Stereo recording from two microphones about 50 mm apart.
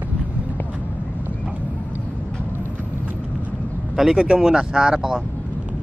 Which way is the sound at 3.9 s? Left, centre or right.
Centre.